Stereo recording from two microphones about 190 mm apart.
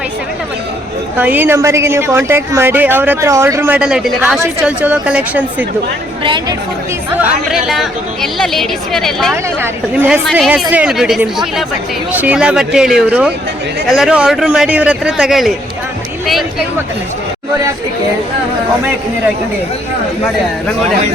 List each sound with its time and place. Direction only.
1.2 s speech: 10° right (ahead or behind)
6.2 s a woman's voice: 25° right (ahead or behind)
7.2 s speech: centre (ahead or behind)
9.3 s speech: 10° right (ahead or behind)